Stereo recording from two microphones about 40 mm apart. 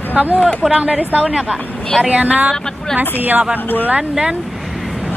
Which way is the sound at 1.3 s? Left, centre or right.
Right.